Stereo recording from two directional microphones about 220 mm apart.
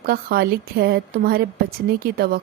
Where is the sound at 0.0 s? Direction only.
45° right (ahead or behind).